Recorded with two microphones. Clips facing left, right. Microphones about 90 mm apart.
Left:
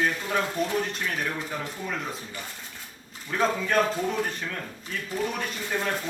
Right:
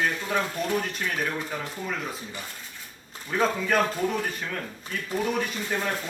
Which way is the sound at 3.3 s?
5° right (ahead or behind).